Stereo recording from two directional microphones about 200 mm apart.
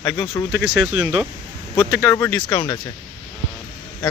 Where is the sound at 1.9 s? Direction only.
15° left (ahead or behind).